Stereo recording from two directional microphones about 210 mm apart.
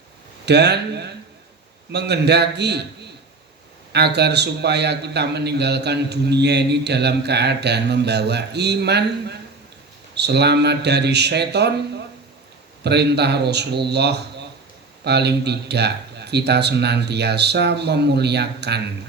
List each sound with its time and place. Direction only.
0.4 s a man's voice: 55° right (ahead or behind)
3.9 s a man's voice: 50° right (ahead or behind)
12.8 s a man's voice: 50° right (ahead or behind)